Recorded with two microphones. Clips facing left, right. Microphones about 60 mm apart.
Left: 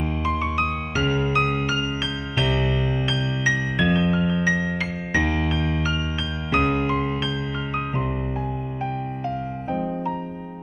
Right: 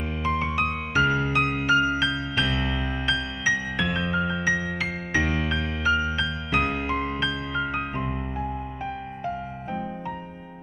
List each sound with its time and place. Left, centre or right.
0.0 s music: centre